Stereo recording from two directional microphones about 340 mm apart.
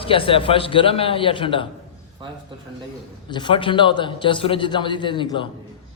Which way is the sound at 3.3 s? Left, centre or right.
Centre.